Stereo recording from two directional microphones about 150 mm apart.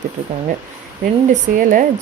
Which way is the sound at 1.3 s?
60° right (ahead or behind).